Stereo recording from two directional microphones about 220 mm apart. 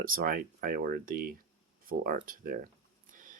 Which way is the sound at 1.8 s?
40° right (ahead or behind).